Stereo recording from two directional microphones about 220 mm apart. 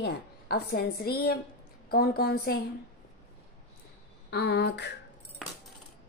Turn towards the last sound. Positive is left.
turn(degrees=50)  # may be behind; listen again after turning